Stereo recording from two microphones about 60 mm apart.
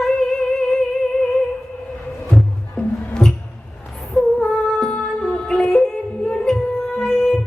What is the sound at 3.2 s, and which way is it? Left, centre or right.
Music, centre.